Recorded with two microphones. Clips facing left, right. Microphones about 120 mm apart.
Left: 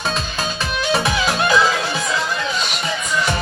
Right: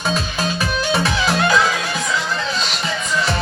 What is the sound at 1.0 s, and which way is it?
Music, 20° left (ahead or behind).